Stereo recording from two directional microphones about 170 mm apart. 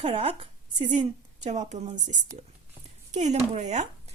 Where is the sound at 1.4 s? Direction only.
40° right (ahead or behind).